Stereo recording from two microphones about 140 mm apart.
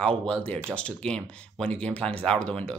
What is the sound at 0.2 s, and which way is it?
Speech, 10° left (ahead or behind).